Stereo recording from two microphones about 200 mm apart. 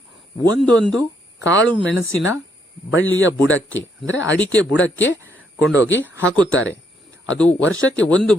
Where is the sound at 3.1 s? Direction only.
70° left (ahead or behind).